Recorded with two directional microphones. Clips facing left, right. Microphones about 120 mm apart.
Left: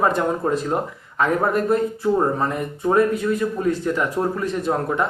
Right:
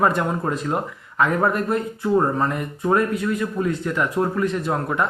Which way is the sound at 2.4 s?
30° left (ahead or behind).